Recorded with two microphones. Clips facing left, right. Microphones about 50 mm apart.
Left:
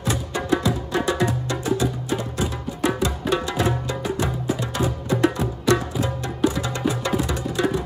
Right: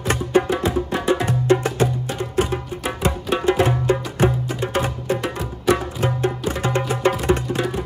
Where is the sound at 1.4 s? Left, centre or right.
Right.